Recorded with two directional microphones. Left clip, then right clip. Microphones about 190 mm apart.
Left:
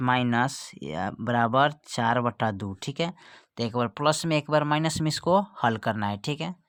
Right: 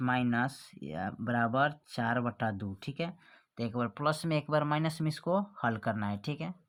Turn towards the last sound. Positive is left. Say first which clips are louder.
# left 8 dB
turn(degrees=40)  # may be behind; listen again after turning